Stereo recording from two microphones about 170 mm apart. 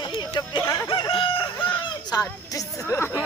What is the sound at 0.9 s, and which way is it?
Speech, 30° left (ahead or behind).